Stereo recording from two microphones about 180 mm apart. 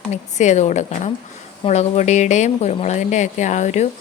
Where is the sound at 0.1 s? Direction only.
40° left (ahead or behind).